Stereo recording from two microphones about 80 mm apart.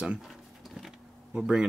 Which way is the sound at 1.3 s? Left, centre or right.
Centre.